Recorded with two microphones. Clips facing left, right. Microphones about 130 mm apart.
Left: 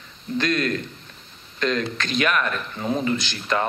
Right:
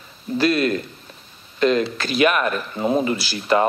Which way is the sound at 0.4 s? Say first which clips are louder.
Right 5 dB; 10° right (ahead or behind).